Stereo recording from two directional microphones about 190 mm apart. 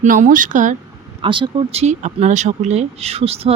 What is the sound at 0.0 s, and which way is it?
Speech, 45° right (ahead or behind).